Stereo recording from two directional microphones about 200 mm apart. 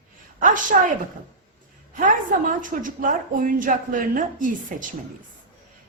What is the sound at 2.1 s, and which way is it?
A woman's voice, 40° right (ahead or behind).